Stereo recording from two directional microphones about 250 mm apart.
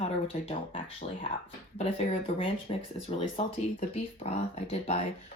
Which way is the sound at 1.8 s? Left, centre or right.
Left.